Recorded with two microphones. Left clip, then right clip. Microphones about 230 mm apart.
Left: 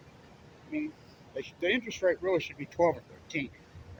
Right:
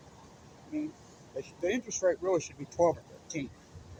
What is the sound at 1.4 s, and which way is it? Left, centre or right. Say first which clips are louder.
Speech: left 3 dB; centre.